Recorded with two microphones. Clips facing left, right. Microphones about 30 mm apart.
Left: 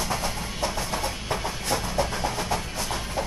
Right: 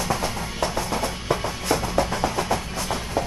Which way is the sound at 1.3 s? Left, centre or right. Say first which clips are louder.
Right 5 dB; right.